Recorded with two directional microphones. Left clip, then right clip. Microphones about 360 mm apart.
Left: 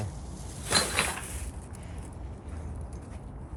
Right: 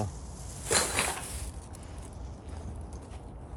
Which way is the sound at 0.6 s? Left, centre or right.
Right.